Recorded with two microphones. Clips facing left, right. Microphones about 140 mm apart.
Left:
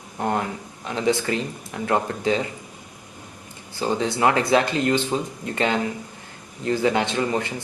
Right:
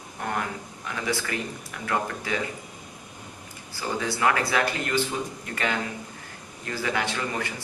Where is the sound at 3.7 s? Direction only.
20° left (ahead or behind).